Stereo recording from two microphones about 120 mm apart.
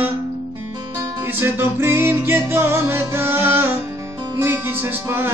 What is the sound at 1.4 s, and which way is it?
Music, 20° right (ahead or behind).